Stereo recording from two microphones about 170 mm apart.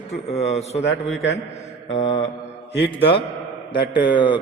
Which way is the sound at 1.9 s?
40° left (ahead or behind).